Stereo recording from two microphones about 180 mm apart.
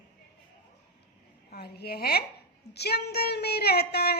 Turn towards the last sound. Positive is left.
turn(degrees=60)  # may be behind; listen again after turning